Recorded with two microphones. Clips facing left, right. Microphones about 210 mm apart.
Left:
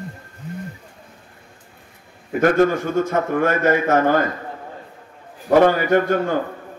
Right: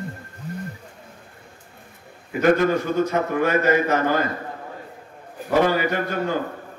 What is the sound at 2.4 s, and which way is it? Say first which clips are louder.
A man's voice: left 2 dB; 50° left (ahead or behind).